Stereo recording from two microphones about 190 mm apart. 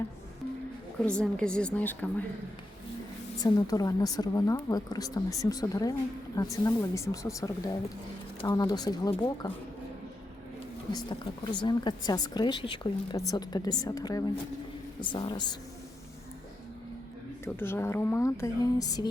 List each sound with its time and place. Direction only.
1.0 s a woman's voice: 5° left (ahead or behind)
3.4 s speech: 20° left (ahead or behind)
10.9 s speech: 25° left (ahead or behind)
17.4 s speech: 10° left (ahead or behind)